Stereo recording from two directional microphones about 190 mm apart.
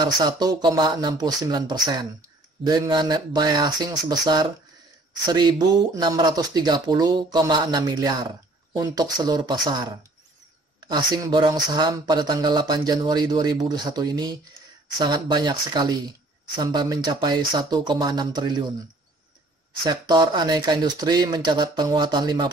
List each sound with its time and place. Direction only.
0.0 s speech: 20° right (ahead or behind)
19.8 s speech: 20° right (ahead or behind)